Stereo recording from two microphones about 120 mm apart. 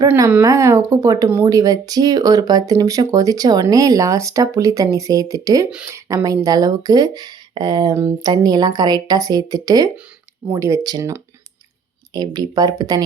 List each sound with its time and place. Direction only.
0.3 s speech: 20° right (ahead or behind)
7.9 s speech: 25° right (ahead or behind)
8.4 s speech: 35° right (ahead or behind)